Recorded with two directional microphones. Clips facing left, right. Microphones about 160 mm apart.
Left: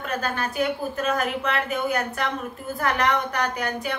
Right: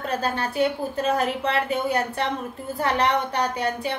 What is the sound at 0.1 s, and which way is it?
A woman's voice, 30° right (ahead or behind).